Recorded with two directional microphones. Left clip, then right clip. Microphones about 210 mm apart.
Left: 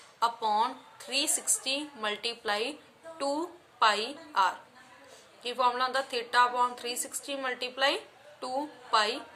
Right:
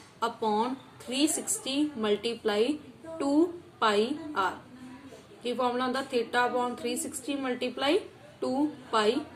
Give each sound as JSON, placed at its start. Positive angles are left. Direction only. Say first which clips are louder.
{"t": 0.2, "sound": "a woman's voice", "louder": "left 1 dB", "side_deg": 40}
{"t": 3.8, "sound": "a woman's voice", "louder": "even", "side_deg": 40}